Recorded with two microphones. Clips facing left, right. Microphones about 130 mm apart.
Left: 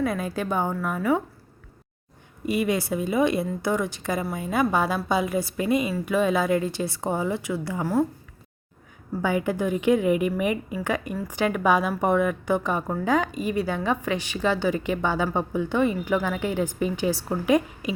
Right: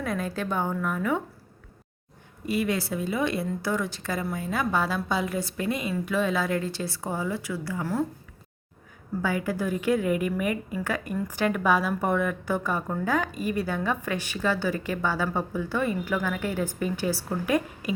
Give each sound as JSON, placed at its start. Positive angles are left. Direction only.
{"t": 0.0, "sound": "a woman's voice", "side_deg": 5}
{"t": 2.5, "sound": "a woman's voice", "side_deg": 15}
{"t": 9.2, "sound": "a woman's voice", "side_deg": 20}